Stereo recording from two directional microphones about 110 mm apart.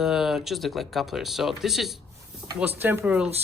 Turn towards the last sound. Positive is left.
turn(degrees=-15)  # may be behind; listen again after turning